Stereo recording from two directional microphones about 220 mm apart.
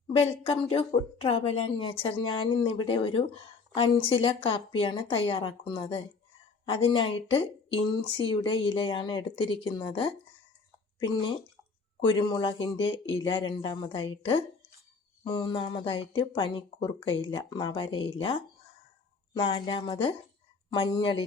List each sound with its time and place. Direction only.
0.1 s speech: 30° left (ahead or behind)